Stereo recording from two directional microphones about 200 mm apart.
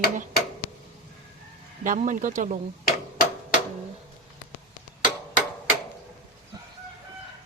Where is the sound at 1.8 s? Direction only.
40° right (ahead or behind).